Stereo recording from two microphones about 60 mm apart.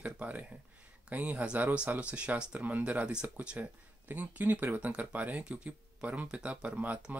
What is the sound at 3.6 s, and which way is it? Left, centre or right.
Speech, right.